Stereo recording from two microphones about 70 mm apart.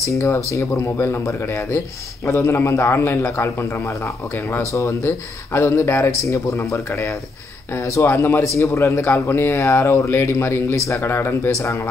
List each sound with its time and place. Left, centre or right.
0.2 s a man's voice: left
11.5 s a man's voice: left